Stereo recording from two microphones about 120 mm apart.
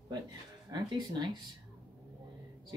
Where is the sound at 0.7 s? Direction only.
35° right (ahead or behind).